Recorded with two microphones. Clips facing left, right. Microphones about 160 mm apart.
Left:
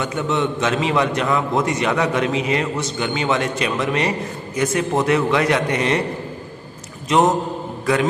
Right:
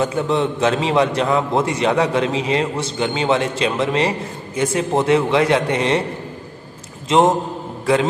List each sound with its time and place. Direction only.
0.0 s a man's voice: 30° right (ahead or behind)
7.1 s a man's voice: 25° right (ahead or behind)